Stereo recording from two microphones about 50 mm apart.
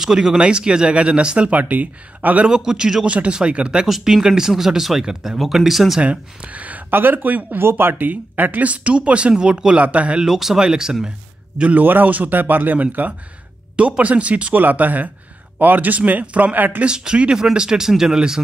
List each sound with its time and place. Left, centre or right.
0.0 s speech: centre; by 2.4 s right
2.4 s speech: centre
3.8 s speech: centre
5.9 s speech: right
6.9 s speech: right
10.2 s speech: centre
11.5 s a man's voice: right
11.8 s speech: right
13.7 s speech: right
16.8 s speech: centre